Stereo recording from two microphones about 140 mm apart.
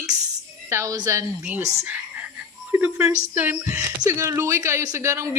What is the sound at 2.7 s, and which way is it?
A woman's voice, 15° right (ahead or behind).